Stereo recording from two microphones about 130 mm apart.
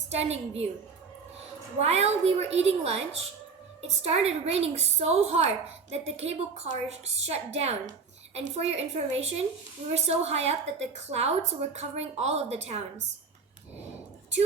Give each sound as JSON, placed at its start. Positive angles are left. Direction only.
{"t": 0.1, "sound": "a woman's voice", "side_deg": -55}
{"t": 1.8, "sound": "a woman's voice", "side_deg": -55}